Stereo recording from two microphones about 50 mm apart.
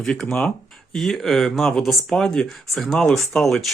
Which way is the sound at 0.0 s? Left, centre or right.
Centre.